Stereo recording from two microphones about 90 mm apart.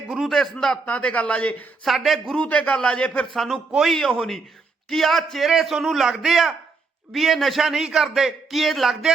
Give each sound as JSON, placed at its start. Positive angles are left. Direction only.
{"t": 0.1, "sound": "a man's voice", "side_deg": 0}
{"t": 0.9, "sound": "a man's voice", "side_deg": 15}
{"t": 1.8, "sound": "a man's voice", "side_deg": 0}
{"t": 2.4, "sound": "a man's voice", "side_deg": 15}
{"t": 3.3, "sound": "a man's voice", "side_deg": 0}